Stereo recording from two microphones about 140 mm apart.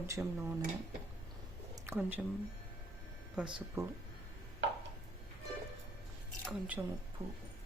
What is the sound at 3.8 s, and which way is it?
Speech, 20° right (ahead or behind).